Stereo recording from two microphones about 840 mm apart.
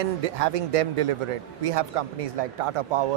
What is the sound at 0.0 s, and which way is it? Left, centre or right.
A man's voice, right.